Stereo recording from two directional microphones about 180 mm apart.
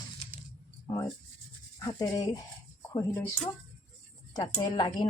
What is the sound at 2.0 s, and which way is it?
A woman's voice, 20° left (ahead or behind).